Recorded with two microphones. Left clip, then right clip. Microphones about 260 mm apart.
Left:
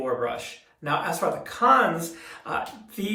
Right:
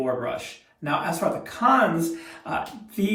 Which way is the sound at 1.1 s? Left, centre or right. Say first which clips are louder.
Left 1 dB; centre.